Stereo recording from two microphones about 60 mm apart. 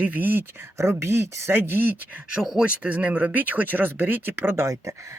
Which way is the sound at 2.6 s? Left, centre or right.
Right.